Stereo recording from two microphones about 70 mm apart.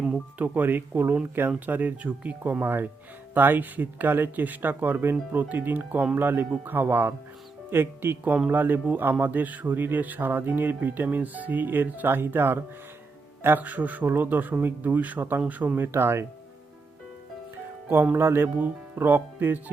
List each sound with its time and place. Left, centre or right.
0.3 s speech: right
15.9 s speech: right
17.8 s speech: right